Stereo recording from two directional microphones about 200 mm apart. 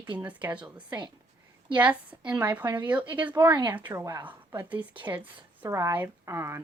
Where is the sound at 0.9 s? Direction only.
20° right (ahead or behind).